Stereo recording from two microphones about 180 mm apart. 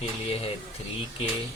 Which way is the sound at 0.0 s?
35° left (ahead or behind).